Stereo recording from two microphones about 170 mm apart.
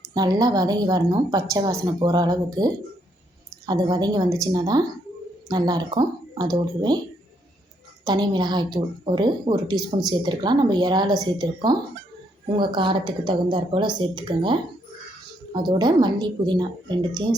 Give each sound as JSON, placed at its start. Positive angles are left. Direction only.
{"t": 0.1, "sound": "a woman's voice", "side_deg": -25}
{"t": 8.0, "sound": "a woman's voice", "side_deg": -25}
{"t": 15.6, "sound": "a woman's voice", "side_deg": -25}